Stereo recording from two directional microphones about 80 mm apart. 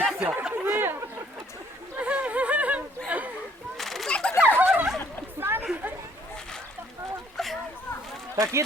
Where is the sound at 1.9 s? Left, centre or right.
Centre.